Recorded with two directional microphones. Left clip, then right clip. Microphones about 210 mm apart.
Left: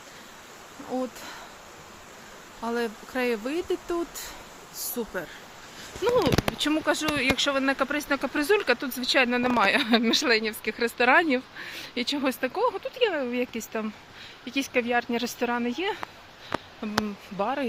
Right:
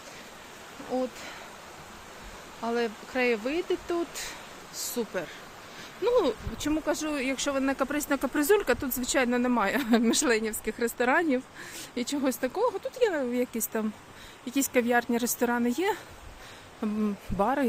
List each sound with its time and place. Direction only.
0.9 s speech: 20° left (ahead or behind)
2.6 s speech: 15° left (ahead or behind); by 17.7 s 25° right (ahead or behind)